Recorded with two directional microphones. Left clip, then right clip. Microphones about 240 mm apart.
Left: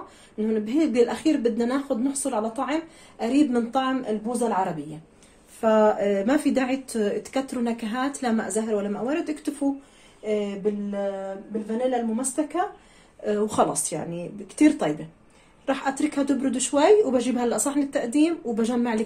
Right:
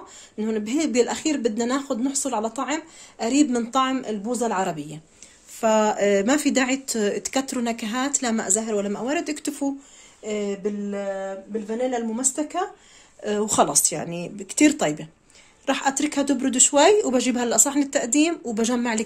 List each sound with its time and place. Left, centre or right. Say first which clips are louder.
0.4 s speech: left 1 dB; right
12.4 s speech: left 1 dB; right